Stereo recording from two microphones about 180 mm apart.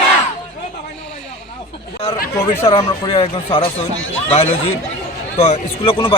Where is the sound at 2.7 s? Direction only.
25° left (ahead or behind).